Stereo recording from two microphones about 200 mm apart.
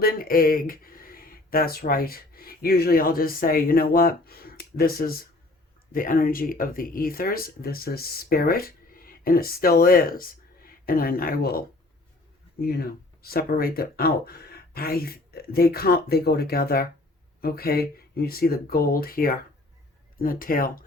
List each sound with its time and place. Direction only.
0.0 s speech: 45° left (ahead or behind)